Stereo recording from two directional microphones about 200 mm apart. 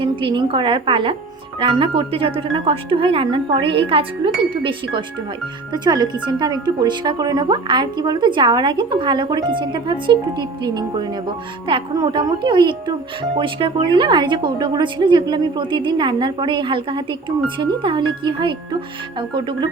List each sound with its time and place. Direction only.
0.0 s speech: 25° right (ahead or behind)